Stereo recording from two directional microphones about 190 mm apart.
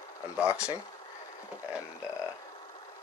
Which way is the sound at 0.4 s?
5° right (ahead or behind).